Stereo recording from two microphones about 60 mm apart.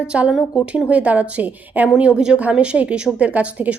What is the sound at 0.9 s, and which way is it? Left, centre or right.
Speech, right.